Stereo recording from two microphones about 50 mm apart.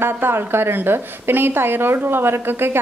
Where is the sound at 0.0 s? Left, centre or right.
Right.